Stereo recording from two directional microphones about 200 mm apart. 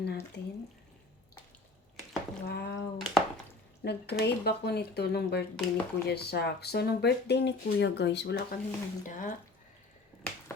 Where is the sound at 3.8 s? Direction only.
55° left (ahead or behind).